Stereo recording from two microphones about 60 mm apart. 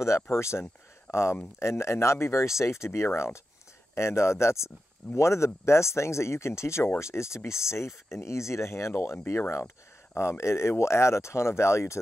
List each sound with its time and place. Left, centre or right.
0.0 s speech: left